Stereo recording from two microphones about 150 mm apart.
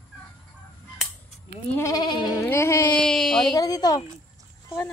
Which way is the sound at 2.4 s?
15° left (ahead or behind).